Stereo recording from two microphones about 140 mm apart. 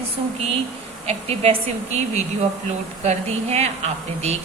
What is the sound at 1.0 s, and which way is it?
A woman's voice, 45° right (ahead or behind).